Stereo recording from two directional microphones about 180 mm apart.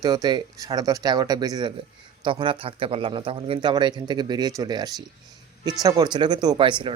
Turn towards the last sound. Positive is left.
turn(degrees=-25)  # may be behind; listen again after turning